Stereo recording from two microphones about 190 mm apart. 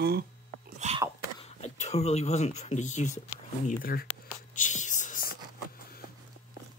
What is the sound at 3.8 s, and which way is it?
Speech, 50° left (ahead or behind).